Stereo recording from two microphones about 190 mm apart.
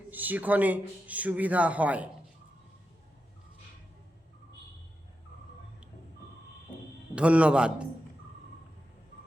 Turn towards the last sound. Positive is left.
turn(degrees=-5)  # may be behind; listen again after turning